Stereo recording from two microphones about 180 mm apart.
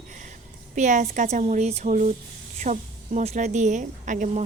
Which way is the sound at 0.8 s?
45° right (ahead or behind).